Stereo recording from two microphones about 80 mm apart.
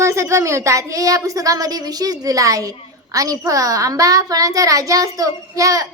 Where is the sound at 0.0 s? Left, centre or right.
Right.